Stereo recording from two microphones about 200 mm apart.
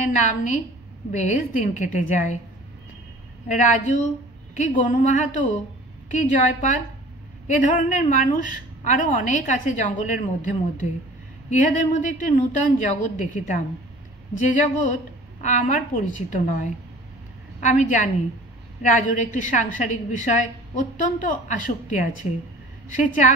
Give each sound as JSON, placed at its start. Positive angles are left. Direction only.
{"t": 0.1, "sound": "a woman's voice", "side_deg": 35}
{"t": 3.4, "sound": "a woman's voice", "side_deg": 40}